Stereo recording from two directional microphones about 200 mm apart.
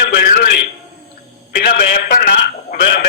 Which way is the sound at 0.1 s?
50° left (ahead or behind).